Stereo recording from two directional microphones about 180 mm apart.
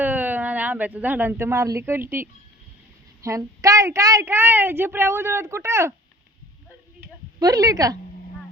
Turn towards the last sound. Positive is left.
turn(degrees=-20)  # may be behind; listen again after turning